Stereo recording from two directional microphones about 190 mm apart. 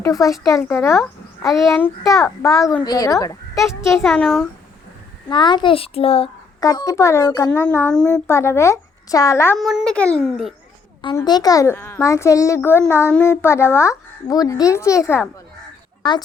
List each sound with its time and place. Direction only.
0.0 s a child's voice: 15° left (ahead or behind)
3.6 s a child's voice: centre (ahead or behind)
5.3 s a child's voice: 25° left (ahead or behind)
6.7 s a child's voice: 15° left (ahead or behind)
9.6 s a child's voice: centre (ahead or behind)
11.2 s a child's voice: 20° left (ahead or behind)